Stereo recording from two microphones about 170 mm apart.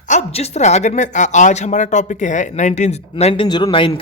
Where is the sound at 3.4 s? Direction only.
25° left (ahead or behind).